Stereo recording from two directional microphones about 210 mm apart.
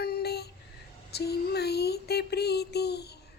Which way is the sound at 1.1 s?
50° left (ahead or behind).